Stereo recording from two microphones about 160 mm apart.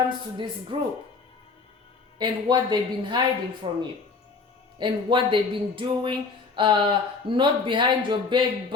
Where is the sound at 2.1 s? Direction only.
30° right (ahead or behind).